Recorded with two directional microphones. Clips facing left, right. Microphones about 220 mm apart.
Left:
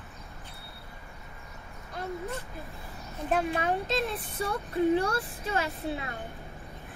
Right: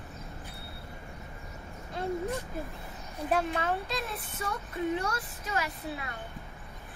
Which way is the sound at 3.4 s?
15° left (ahead or behind).